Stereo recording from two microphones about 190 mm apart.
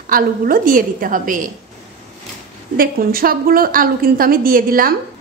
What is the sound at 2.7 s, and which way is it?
A woman's voice, 50° right (ahead or behind).